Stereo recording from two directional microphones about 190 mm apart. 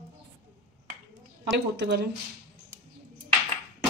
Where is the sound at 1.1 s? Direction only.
65° right (ahead or behind).